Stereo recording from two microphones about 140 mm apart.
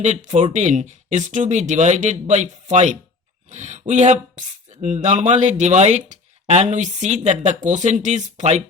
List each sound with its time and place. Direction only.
0.0 s speech: 60° right (ahead or behind)